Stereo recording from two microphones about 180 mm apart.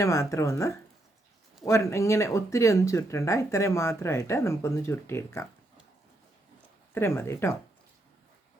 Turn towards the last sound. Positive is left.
turn(degrees=15)  # may be behind; listen again after turning